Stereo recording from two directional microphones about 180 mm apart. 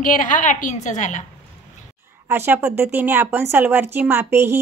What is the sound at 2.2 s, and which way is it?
Speech, 15° right (ahead or behind).